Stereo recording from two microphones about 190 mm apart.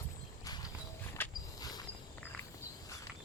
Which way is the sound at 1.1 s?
20° left (ahead or behind).